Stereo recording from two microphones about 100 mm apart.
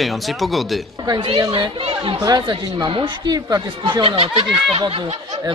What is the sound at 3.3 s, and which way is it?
Speech, 40° right (ahead or behind).